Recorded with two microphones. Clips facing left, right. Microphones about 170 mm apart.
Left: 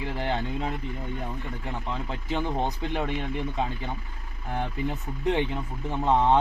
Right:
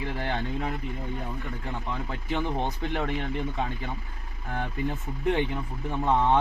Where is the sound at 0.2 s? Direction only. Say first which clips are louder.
Left 3 dB; 20° left (ahead or behind).